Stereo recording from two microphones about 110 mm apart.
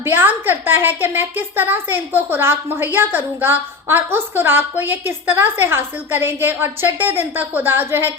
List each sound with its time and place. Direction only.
0.0 s a woman's voice: 20° right (ahead or behind)